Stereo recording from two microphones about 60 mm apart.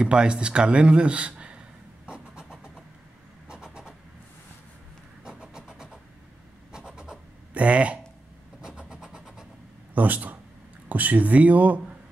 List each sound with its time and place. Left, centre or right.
0.0 s speech: centre
2.0 s vehicle: centre
5.2 s vehicle: centre
6.7 s scratch: centre
8.5 s vehicle: centre
9.9 s speech: right